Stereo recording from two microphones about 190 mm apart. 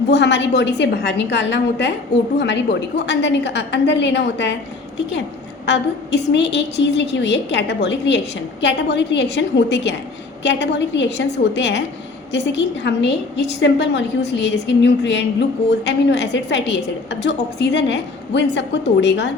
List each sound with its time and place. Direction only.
0.1 s a woman's voice: 65° left (ahead or behind)
5.6 s a woman's voice: 70° left (ahead or behind)